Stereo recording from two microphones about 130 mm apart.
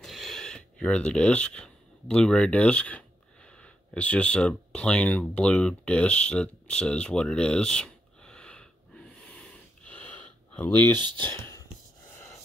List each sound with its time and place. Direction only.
0.0 s a sound: centre (ahead or behind)
11.0 s speech: 35° right (ahead or behind)
11.3 s whispering: 20° left (ahead or behind)